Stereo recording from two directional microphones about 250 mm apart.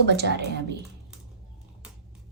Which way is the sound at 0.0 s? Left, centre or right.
Right.